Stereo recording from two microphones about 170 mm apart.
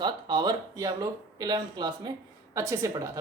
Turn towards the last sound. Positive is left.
turn(degrees=-20)  # may be behind; listen again after turning